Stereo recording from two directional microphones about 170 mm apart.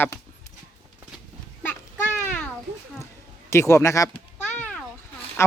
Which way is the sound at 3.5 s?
15° left (ahead or behind).